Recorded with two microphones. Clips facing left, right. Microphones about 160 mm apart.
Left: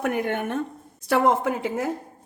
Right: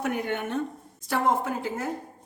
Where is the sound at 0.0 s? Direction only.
55° left (ahead or behind).